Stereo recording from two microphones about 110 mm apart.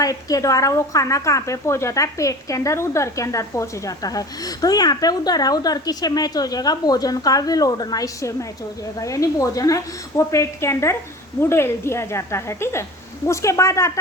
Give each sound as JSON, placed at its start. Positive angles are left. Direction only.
{"t": 0.0, "sound": "a woman's voice", "side_deg": 35}